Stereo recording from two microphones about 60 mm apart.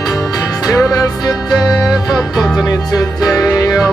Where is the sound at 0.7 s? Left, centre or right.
Left.